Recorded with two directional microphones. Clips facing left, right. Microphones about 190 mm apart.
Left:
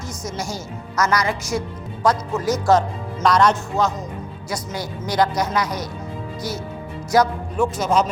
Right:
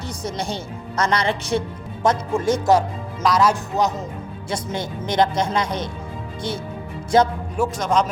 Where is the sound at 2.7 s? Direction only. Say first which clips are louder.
Even; 10° right (ahead or behind).